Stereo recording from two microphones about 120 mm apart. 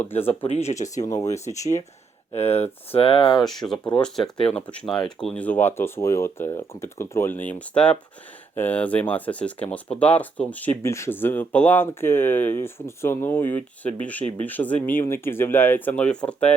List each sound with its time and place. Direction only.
0.0 s speech: 15° left (ahead or behind)
0.3 s speech: 60° left (ahead or behind); by 1.0 s 80° left
1.0 s speech: 30° left (ahead or behind)
2.3 s speech: 60° left (ahead or behind)
3.4 s speech: centre (ahead or behind)